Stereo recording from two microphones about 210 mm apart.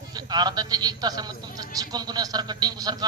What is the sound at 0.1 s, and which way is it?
A man's voice, 20° right (ahead or behind).